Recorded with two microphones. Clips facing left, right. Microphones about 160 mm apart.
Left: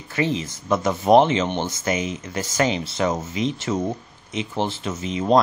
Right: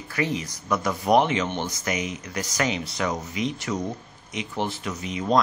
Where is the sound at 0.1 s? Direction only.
25° left (ahead or behind).